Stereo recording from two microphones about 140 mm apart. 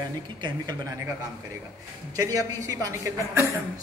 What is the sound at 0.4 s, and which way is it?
Speech, 25° right (ahead or behind).